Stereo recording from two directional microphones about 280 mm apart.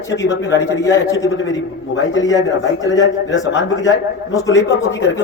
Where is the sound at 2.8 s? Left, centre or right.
Left.